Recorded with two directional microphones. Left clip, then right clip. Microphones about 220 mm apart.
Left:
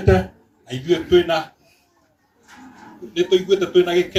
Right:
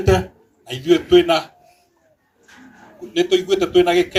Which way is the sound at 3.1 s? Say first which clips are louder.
Even; 35° right (ahead or behind).